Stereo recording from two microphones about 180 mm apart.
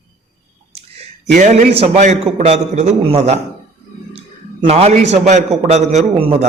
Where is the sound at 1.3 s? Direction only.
45° right (ahead or behind).